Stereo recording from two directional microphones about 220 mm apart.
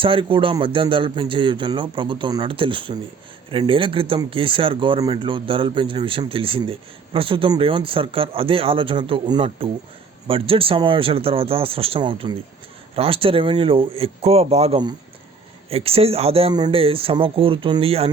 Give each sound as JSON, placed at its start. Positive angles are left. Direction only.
{"t": 0.0, "sound": "speech", "side_deg": -25}